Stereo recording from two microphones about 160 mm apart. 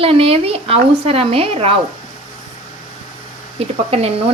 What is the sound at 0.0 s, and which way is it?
Speech, 35° right (ahead or behind).